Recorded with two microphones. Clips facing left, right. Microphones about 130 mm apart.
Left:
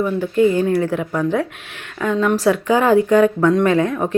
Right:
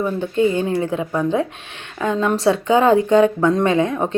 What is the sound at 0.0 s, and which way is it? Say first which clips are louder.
Speech: left 2 dB; 25° right (ahead or behind).